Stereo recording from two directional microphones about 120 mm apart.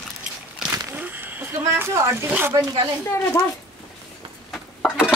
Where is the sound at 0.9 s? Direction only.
15° right (ahead or behind).